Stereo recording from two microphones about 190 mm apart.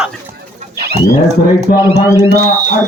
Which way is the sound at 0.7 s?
55° right (ahead or behind).